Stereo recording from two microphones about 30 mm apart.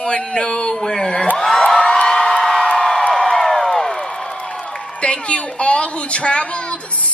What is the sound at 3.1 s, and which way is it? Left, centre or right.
Crowd, left.